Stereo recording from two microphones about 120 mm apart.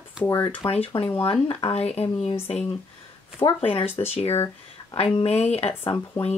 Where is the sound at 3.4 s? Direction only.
20° left (ahead or behind).